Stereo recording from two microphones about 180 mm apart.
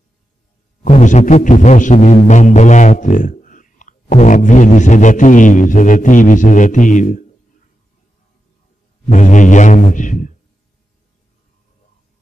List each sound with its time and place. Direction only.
0.8 s music: 40° left (ahead or behind)
9.1 s music: 45° left (ahead or behind)